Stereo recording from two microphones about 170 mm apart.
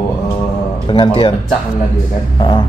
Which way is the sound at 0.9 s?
30° left (ahead or behind).